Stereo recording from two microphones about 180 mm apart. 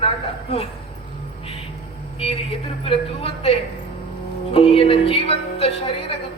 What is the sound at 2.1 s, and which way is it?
A woman's voice, 35° left (ahead or behind).